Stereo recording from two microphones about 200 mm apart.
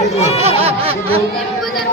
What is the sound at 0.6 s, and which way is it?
Music, 30° right (ahead or behind).